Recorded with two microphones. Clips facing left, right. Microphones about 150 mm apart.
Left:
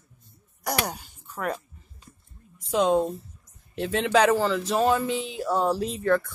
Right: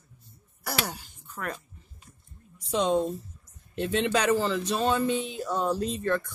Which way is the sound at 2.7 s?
5° left (ahead or behind).